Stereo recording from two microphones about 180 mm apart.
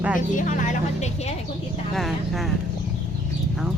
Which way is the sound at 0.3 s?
45° left (ahead or behind).